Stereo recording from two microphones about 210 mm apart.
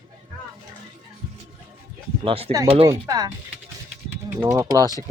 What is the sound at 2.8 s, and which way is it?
Speech, 15° right (ahead or behind).